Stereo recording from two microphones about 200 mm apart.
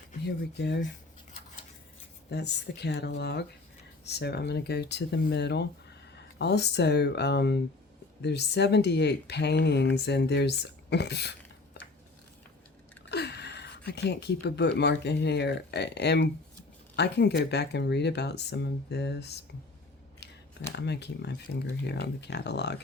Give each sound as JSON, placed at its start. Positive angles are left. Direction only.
{"t": 2.3, "sound": "speech", "side_deg": 60}
{"t": 13.1, "sound": "speech", "side_deg": 55}
{"t": 20.7, "sound": "speech", "side_deg": 60}